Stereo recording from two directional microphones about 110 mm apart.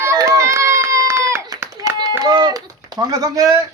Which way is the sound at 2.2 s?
40° right (ahead or behind).